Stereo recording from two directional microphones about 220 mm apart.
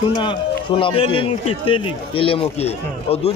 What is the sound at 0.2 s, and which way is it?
Speech, 20° left (ahead or behind).